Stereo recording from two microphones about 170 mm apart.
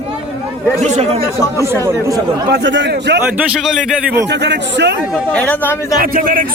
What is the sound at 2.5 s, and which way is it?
Speech, 90° right.